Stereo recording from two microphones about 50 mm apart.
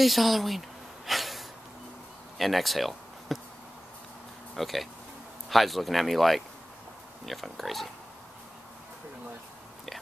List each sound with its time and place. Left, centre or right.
0.0 s a sound: centre
2.3 s speech: centre
4.6 s speech: centre